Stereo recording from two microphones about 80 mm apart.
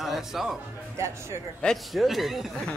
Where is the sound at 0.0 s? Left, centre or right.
Centre.